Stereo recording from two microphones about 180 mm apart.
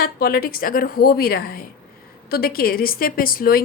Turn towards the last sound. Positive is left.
turn(degrees=55)  # may be behind; listen again after turning